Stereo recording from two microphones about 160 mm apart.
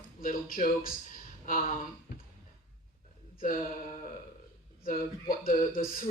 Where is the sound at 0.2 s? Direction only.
60° left (ahead or behind).